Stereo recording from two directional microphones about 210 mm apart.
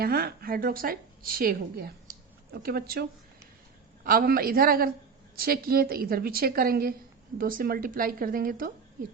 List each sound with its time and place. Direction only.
0.0 s a woman's voice: 45° right (ahead or behind)